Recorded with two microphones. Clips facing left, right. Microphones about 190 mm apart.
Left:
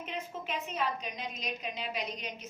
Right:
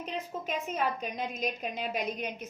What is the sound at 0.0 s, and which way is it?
A woman's voice, 40° right (ahead or behind).